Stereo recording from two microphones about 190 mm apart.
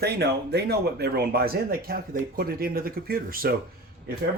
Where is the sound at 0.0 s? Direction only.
55° right (ahead or behind).